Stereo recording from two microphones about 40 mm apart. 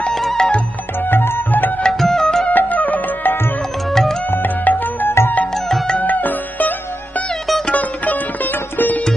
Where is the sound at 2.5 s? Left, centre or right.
Left.